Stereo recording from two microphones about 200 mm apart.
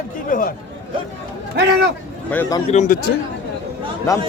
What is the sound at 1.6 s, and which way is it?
Speech, 60° right (ahead or behind).